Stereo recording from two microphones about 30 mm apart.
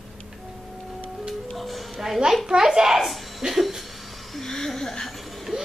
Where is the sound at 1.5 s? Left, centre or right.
Centre.